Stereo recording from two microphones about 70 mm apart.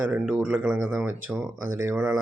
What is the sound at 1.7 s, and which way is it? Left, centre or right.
Speech, right.